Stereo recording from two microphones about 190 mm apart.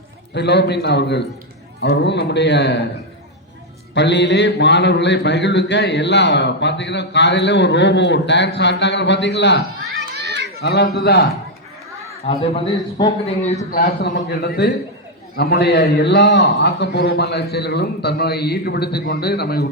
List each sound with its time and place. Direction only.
0.3 s a man's voice: 60° left (ahead or behind)
3.9 s speech: 65° left (ahead or behind)
10.2 s children playing: 65° right (ahead or behind)
10.6 s a man's voice: 60° left (ahead or behind)
12.2 s a man's voice: 30° left (ahead or behind)
13.7 s a man's voice: 55° left (ahead or behind)